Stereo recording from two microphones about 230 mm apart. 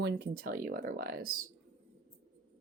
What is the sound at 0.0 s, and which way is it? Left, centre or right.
Speech, right.